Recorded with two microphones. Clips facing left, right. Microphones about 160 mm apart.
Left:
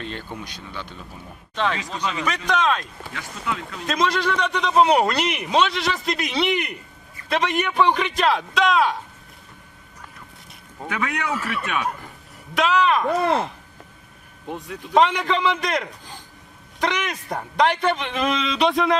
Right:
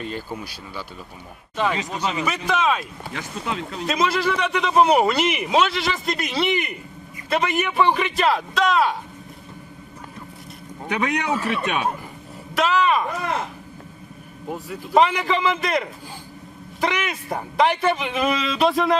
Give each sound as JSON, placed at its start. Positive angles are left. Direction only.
{"t": 0.0, "sound": "a man's voice", "side_deg": -5}
{"t": 3.4, "sound": "a man's voice", "side_deg": -25}
{"t": 3.8, "sound": "a man's voice", "side_deg": -5}
{"t": 10.8, "sound": "a man's voice", "side_deg": -20}
{"t": 12.5, "sound": "a man's voice", "side_deg": 0}
{"t": 14.4, "sound": "a man's voice", "side_deg": -5}